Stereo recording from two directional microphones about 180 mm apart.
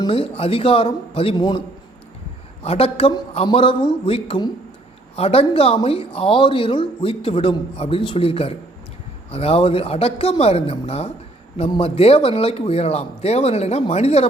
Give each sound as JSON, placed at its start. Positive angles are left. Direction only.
{"t": 0.0, "sound": "speech", "side_deg": 30}
{"t": 2.6, "sound": "speech", "side_deg": 35}